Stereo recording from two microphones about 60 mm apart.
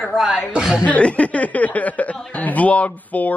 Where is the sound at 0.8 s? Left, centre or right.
Left.